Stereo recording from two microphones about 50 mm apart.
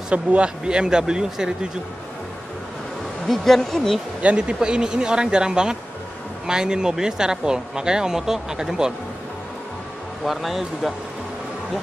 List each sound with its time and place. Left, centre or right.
0.1 s speech: right
3.3 s speech: centre
4.2 s speech: right
10.2 s speech: centre